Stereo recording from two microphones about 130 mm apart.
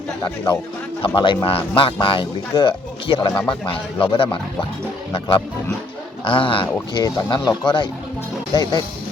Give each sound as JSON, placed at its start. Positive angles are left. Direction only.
{"t": 1.0, "sound": "speech", "side_deg": 40}
{"t": 6.2, "sound": "speech", "side_deg": 40}